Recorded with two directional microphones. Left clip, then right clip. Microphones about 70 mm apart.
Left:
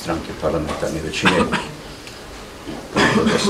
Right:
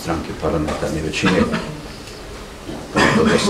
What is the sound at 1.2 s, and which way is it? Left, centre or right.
Speech, left.